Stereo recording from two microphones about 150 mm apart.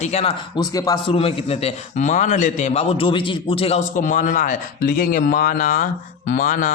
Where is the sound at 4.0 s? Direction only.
60° left (ahead or behind).